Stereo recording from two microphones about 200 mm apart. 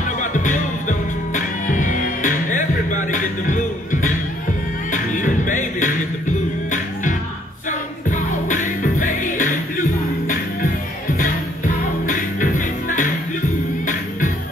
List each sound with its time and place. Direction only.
0.2 s music: 40° left (ahead or behind)